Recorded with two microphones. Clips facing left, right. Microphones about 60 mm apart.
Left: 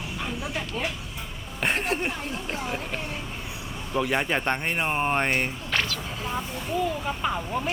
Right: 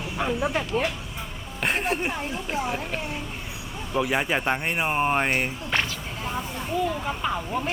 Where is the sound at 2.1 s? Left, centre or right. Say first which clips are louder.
Right 2 dB; centre.